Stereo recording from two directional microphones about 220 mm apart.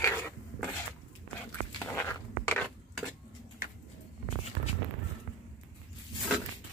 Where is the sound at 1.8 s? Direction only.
10° left (ahead or behind).